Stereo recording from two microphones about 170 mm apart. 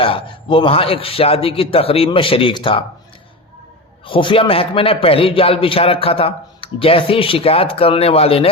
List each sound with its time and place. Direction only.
0.0 s a man's voice: 30° left (ahead or behind)
4.0 s a man's voice: 30° left (ahead or behind)